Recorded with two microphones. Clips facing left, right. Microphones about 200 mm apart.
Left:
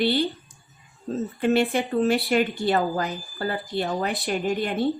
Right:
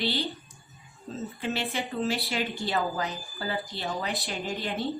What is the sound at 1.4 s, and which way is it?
A woman's voice, 50° left (ahead or behind).